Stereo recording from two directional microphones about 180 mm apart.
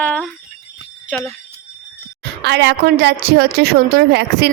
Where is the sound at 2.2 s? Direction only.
75° right (ahead or behind).